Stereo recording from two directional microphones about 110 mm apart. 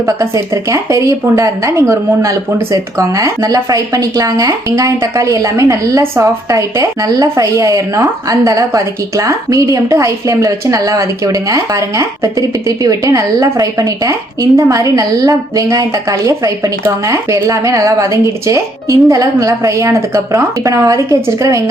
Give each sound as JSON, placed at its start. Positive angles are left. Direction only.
{"t": 0.0, "sound": "a woman's voice", "side_deg": -30}